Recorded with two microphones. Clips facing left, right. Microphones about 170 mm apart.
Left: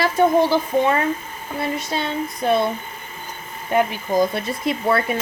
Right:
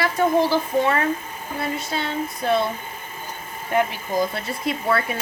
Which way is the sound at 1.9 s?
20° left (ahead or behind).